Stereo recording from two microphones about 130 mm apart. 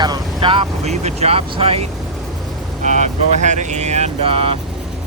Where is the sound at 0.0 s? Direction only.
35° right (ahead or behind).